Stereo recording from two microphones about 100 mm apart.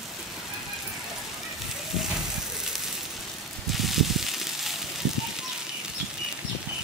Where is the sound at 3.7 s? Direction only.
Centre (ahead or behind).